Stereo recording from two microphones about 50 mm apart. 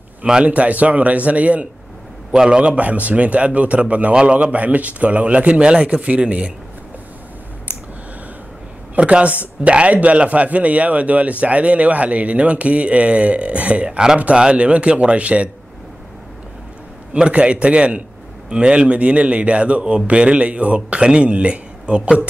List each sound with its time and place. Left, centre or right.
0.5 s a man's voice: right
2.3 s a man's voice: centre
8.9 s a man's voice: right
17.1 s a man's voice: right